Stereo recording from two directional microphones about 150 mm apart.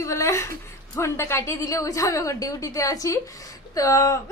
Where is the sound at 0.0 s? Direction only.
20° left (ahead or behind).